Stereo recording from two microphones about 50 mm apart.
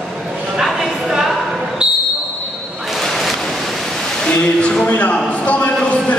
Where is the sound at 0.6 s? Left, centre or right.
Centre.